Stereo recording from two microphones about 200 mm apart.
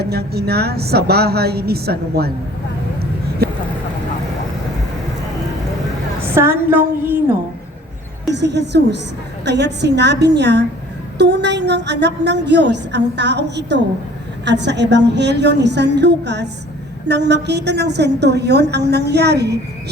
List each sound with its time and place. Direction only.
0.0 s a woman's voice: 50° right (ahead or behind)
6.2 s a woman's voice: 10° right (ahead or behind)
8.3 s a woman's voice: 60° right (ahead or behind)